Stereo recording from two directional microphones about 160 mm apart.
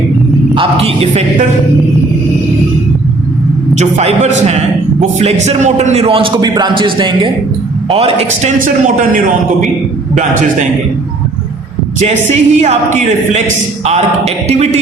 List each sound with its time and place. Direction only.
0.5 s a man's voice: 35° right (ahead or behind)
3.8 s a man's voice: 45° right (ahead or behind)
11.9 s speech: 45° right (ahead or behind)